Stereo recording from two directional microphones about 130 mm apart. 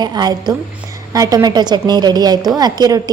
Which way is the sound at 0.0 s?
30° right (ahead or behind).